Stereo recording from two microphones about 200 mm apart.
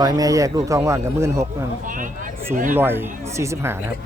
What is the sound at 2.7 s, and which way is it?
Speech, 10° right (ahead or behind).